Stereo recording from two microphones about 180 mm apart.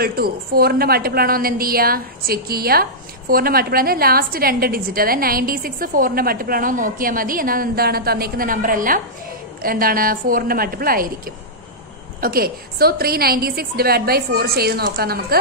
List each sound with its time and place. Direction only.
0.0 s a woman's voice: 60° right (ahead or behind)